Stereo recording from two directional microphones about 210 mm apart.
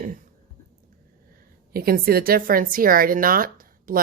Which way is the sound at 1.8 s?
45° right (ahead or behind).